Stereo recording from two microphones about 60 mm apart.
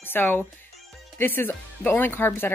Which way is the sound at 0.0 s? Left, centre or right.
Left.